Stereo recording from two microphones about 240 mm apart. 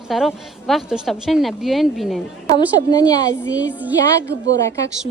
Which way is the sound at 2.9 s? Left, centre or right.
Centre.